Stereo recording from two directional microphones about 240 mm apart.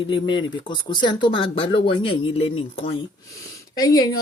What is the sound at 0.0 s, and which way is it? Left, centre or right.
Speech, centre.